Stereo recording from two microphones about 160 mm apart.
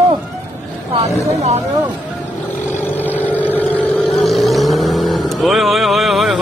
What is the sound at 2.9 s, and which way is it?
Vehicle, 10° left (ahead or behind).